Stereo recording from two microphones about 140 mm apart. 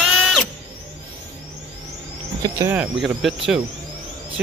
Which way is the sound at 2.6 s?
10° right (ahead or behind).